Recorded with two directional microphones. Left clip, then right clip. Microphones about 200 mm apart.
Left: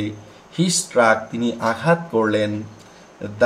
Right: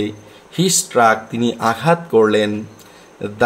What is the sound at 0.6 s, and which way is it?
Speech, 60° right (ahead or behind).